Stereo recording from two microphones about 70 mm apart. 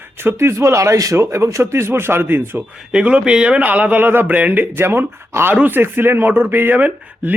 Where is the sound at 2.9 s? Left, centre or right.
Centre.